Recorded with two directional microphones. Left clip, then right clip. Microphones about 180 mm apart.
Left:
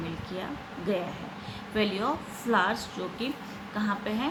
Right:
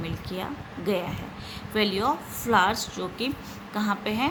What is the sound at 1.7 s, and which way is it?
A woman's voice, 50° right (ahead or behind).